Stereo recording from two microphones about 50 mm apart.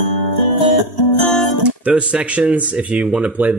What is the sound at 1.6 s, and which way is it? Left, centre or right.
Speech, right.